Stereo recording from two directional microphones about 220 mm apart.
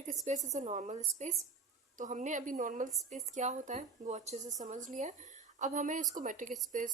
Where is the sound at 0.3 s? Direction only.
30° right (ahead or behind).